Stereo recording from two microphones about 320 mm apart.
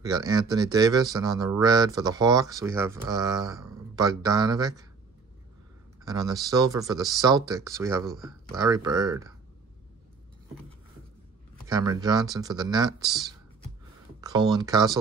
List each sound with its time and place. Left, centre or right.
0.3 s speech: centre
6.0 s speech: centre
11.6 s speech: centre